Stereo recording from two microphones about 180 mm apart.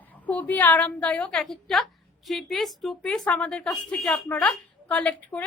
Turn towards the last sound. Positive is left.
turn(degrees=5)  # may be behind; listen again after turning